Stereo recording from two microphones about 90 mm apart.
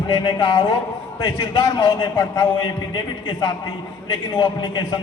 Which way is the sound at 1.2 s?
40° left (ahead or behind).